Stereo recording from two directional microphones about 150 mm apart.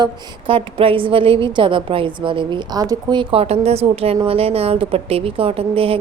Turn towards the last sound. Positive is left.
turn(degrees=-40)  # may be behind; listen again after turning